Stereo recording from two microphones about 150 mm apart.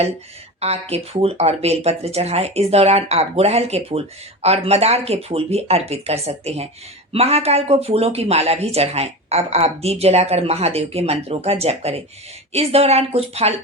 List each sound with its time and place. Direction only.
0.6 s speech: 45° right (ahead or behind)